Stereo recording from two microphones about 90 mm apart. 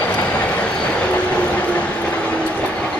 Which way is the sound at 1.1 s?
15° left (ahead or behind).